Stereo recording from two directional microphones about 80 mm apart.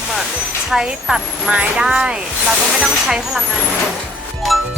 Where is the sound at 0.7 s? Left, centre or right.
Centre.